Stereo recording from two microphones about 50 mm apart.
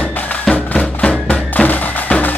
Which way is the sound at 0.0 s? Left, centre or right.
Left.